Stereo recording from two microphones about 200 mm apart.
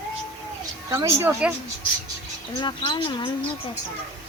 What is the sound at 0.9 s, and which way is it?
Speech, 15° right (ahead or behind).